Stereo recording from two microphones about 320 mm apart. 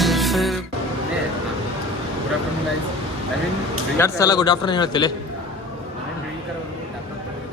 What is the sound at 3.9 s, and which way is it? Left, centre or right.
A man's voice, centre.